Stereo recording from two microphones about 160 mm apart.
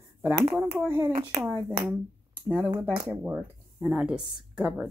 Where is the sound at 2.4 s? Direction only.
10° right (ahead or behind).